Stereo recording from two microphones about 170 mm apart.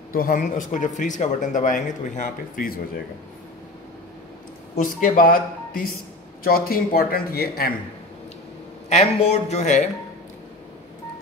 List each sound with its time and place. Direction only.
0.1 s speech: 55° left (ahead or behind)
5.0 s speech: 55° left (ahead or behind)
8.8 s speech: 40° left (ahead or behind)